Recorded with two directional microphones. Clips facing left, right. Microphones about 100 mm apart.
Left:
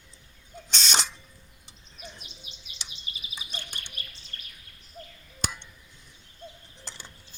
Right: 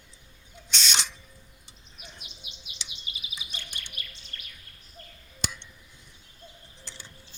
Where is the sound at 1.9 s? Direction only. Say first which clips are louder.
Left 4 dB; 35° left (ahead or behind).